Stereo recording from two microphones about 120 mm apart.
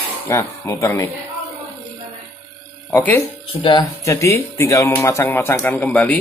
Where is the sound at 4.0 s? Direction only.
25° left (ahead or behind).